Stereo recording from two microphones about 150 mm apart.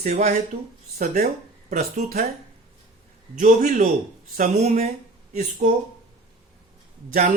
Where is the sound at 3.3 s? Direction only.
65° right (ahead or behind).